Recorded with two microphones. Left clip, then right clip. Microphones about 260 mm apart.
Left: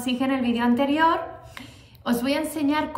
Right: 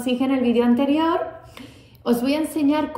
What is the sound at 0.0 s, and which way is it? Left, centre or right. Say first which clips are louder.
A woman's voice: right 4 dB; centre.